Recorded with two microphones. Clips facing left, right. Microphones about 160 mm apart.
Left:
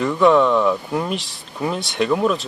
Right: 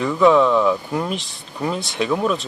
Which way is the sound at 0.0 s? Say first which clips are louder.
Even; centre (ahead or behind).